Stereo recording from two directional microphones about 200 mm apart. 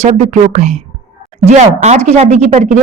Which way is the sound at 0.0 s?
35° right (ahead or behind).